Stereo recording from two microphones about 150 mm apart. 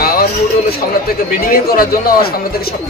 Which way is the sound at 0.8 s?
70° left (ahead or behind).